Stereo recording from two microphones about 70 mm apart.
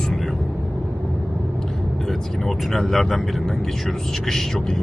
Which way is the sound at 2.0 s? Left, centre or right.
Centre.